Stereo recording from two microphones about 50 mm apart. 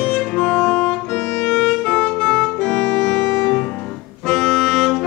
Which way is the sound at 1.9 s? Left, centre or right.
Left.